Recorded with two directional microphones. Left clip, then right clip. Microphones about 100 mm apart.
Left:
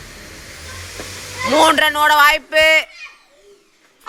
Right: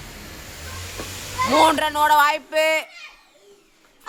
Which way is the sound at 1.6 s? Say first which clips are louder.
Left 5 dB; 15° left (ahead or behind).